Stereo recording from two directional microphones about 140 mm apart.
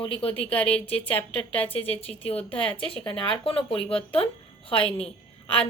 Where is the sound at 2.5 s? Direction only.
10° left (ahead or behind).